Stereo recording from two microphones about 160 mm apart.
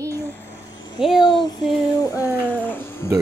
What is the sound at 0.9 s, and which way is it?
Speech, centre (ahead or behind).